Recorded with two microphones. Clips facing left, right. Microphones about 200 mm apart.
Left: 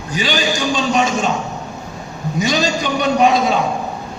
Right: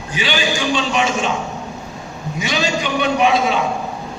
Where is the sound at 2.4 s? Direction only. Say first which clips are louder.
Left 3 dB; 40° left (ahead or behind).